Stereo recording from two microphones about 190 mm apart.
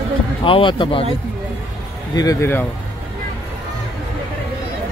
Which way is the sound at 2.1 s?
15° left (ahead or behind).